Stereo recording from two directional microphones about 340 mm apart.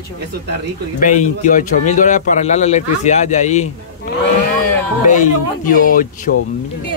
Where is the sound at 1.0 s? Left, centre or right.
Left.